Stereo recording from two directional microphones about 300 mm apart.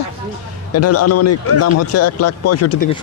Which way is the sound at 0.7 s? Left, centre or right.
Left.